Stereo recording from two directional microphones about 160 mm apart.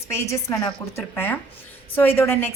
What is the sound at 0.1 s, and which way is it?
A woman's voice, 20° left (ahead or behind).